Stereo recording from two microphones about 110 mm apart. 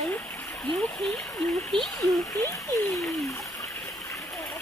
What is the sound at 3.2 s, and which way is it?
Water, 30° left (ahead or behind).